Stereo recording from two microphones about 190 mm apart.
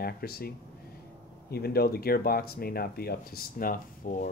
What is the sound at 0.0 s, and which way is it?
Speech, 55° left (ahead or behind).